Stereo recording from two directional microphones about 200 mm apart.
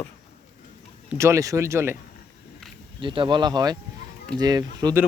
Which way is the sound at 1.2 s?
15° right (ahead or behind).